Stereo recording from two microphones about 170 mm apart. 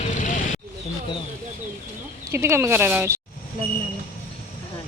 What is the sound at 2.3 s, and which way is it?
Speech, 15° right (ahead or behind).